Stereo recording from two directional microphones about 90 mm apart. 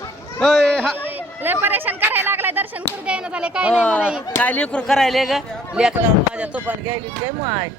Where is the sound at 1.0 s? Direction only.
20° right (ahead or behind).